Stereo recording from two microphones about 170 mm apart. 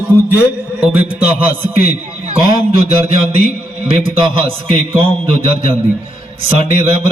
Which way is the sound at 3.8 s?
30° right (ahead or behind).